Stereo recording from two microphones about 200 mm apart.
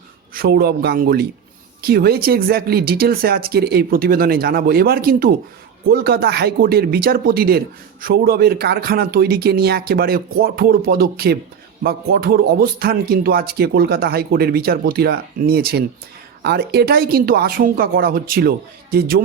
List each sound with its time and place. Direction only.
0.3 s a man's voice: 50° right (ahead or behind)